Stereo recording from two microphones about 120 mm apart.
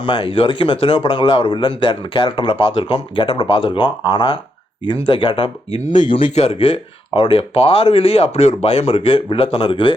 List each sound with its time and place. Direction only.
0.0 s speech: 45° left (ahead or behind)